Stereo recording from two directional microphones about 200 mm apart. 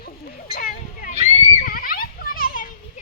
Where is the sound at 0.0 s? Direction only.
50° left (ahead or behind).